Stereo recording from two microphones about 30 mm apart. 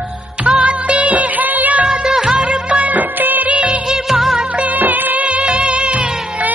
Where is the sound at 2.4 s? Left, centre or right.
Right.